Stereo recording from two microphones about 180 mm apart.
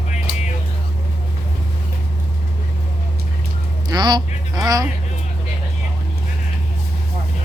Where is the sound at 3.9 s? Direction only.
25° right (ahead or behind).